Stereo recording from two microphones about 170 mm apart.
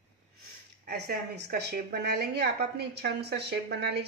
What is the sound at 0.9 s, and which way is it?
A woman's voice, 75° right (ahead or behind).